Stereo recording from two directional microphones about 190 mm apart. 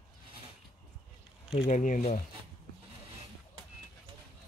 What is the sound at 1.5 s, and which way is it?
Speech, 35° left (ahead or behind).